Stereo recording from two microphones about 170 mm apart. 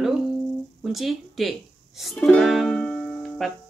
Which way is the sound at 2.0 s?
Centre (ahead or behind).